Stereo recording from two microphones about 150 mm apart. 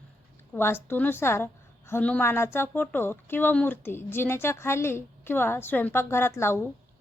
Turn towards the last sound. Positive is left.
turn(degrees=15)  # may be behind; listen again after turning